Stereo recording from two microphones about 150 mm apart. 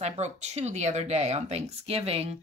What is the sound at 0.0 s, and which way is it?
Speech, 50° right (ahead or behind).